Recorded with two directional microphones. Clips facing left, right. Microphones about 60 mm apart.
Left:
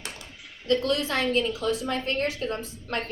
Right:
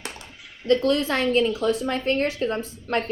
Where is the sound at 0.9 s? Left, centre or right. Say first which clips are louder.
Right 4 dB; right.